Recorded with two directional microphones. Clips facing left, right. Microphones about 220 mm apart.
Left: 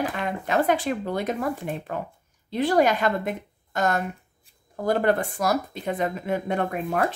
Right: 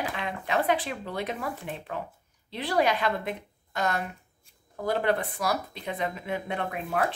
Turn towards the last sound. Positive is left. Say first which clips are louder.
# left 4 dB
turn(degrees=45)  # may be behind; listen again after turning